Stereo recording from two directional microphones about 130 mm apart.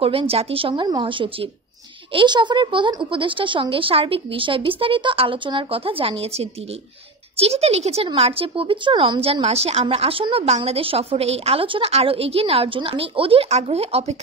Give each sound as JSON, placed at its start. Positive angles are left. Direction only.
{"t": 0.0, "sound": "speech", "side_deg": -45}